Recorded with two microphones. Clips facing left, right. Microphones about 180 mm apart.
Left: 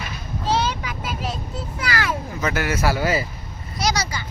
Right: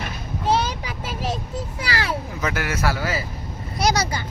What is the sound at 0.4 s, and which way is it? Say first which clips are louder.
Vehicle: right 1 dB; 50° right (ahead or behind).